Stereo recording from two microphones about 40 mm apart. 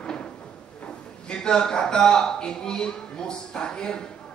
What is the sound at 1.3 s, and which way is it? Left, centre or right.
Speech, centre.